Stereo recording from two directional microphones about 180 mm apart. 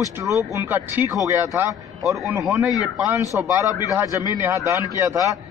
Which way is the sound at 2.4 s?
20° right (ahead or behind).